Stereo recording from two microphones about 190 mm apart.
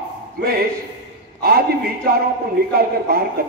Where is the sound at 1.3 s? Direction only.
55° right (ahead or behind).